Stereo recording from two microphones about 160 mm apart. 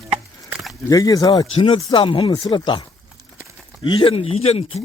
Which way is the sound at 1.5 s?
35° left (ahead or behind).